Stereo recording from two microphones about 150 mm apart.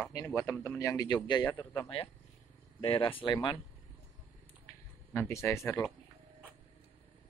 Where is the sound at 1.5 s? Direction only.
10° left (ahead or behind).